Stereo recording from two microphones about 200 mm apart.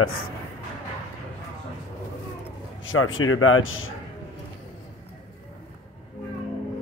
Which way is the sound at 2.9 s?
90° left.